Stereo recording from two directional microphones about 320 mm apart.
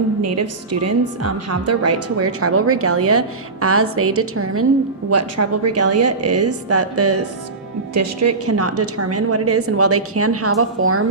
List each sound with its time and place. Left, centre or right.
0.2 s a woman's voice: right